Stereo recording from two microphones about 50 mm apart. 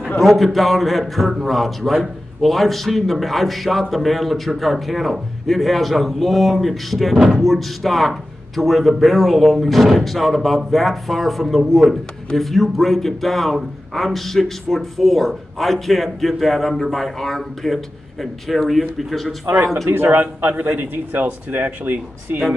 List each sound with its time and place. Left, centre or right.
0.2 s a man's voice: centre
19.9 s speech: right